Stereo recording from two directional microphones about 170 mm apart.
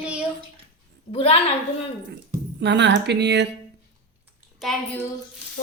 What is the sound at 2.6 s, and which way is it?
Speech, 90° right.